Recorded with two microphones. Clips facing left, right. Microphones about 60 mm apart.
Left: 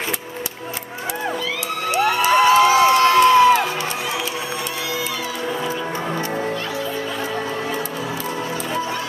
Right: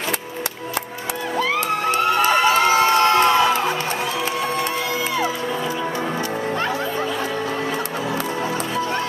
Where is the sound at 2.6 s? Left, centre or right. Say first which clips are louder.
Left 2 dB; right.